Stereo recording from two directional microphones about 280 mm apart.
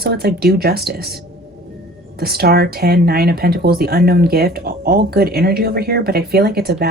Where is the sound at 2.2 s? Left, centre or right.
Right.